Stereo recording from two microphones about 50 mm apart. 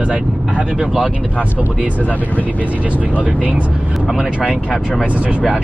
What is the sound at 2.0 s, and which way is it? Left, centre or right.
Speech, left.